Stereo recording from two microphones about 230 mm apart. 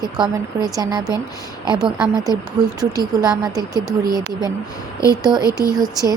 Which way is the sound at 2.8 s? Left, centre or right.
Centre.